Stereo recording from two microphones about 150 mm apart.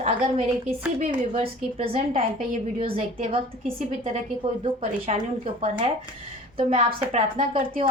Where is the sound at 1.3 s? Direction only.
40° right (ahead or behind).